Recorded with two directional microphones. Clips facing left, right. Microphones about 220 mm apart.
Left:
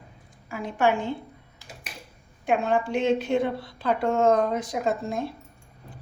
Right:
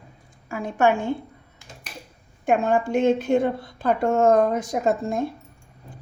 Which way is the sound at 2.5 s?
45° right (ahead or behind).